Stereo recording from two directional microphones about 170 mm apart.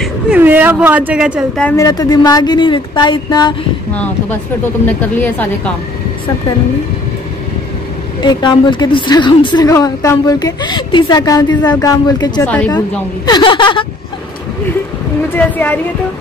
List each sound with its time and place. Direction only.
0.0 s speech: 10° right (ahead or behind)
1.6 s a woman's voice: 10° left (ahead or behind)
1.9 s a woman's voice: 20° left (ahead or behind)
3.9 s a woman's voice: 10° left (ahead or behind)
8.2 s a woman's voice: 25° left (ahead or behind)
12.4 s a woman's voice: 10° left (ahead or behind)
12.7 s a woman's voice: 25° left (ahead or behind)
15.3 s a woman's voice: 10° left (ahead or behind)